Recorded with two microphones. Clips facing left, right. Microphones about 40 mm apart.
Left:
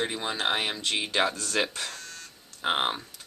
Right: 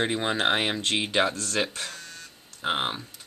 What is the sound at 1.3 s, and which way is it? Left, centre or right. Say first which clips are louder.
Speech: even; centre.